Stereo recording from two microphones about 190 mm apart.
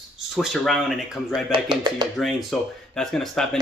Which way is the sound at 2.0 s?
20° right (ahead or behind).